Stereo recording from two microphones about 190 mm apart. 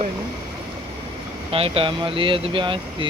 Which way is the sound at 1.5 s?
30° right (ahead or behind).